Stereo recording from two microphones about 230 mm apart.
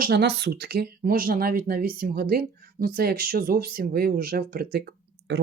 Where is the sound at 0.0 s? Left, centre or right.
Right.